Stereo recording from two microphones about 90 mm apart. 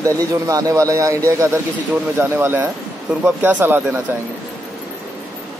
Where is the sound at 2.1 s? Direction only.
25° right (ahead or behind).